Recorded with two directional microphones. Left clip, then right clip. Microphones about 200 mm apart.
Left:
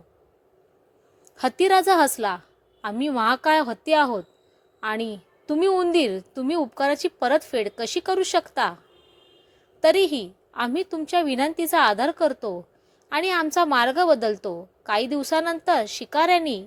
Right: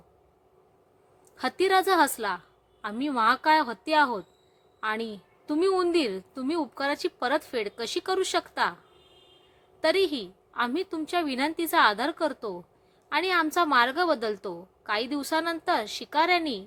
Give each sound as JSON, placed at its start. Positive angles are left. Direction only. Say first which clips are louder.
{"t": 1.4, "sound": "a woman's voice", "louder": "left 5 dB", "side_deg": 15}
{"t": 9.8, "sound": "a woman's voice", "louder": "left 6 dB", "side_deg": 15}